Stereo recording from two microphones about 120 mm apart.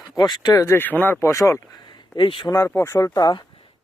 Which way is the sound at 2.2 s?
40° left (ahead or behind).